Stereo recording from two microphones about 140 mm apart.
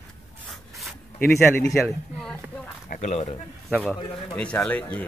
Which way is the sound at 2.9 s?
55° left (ahead or behind).